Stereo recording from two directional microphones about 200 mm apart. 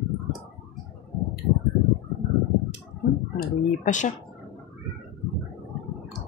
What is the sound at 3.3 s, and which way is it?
Speech, 40° left (ahead or behind).